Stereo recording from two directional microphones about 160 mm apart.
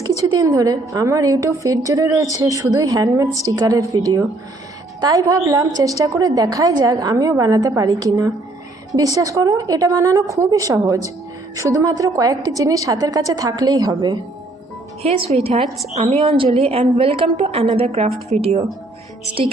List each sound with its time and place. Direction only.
0.0 s a woman's voice: 25° right (ahead or behind)
15.0 s a woman's voice: 40° right (ahead or behind)